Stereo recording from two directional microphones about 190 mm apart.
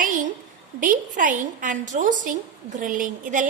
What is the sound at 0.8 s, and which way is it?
A woman's voice, 45° right (ahead or behind).